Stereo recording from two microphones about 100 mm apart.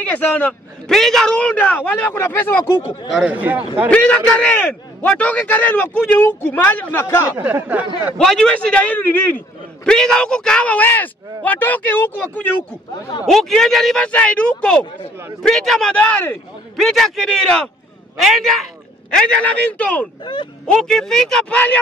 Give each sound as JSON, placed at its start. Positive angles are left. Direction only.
{"t": 0.0, "sound": "a man's voice", "side_deg": 15}
{"t": 0.5, "sound": "a man's voice", "side_deg": 5}
{"t": 3.3, "sound": "speech", "side_deg": -15}
{"t": 3.9, "sound": "a man's voice", "side_deg": 10}
{"t": 7.4, "sound": "speech", "side_deg": -15}
{"t": 8.2, "sound": "a man's voice", "side_deg": 5}
{"t": 9.8, "sound": "a man's voice", "side_deg": 5}
{"t": 13.3, "sound": "a man's voice", "side_deg": 5}
{"t": 16.7, "sound": "a man's voice", "side_deg": 0}